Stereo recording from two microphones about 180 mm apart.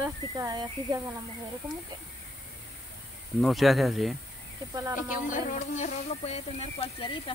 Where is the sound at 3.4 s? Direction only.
Centre (ahead or behind).